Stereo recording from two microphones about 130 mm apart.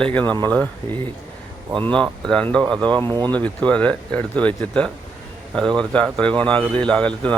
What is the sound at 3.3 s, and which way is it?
Speech, 10° left (ahead or behind).